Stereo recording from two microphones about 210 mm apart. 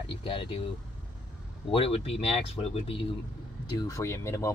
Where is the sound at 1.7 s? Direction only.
25° left (ahead or behind).